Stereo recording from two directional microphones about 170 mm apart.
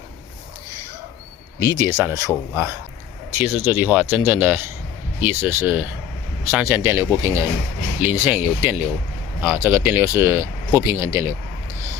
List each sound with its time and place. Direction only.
1.5 s speech: 20° right (ahead or behind)